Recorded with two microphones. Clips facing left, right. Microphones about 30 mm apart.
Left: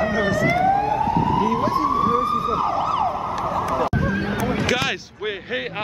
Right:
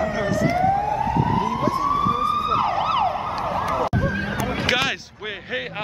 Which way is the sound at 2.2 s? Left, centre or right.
Right.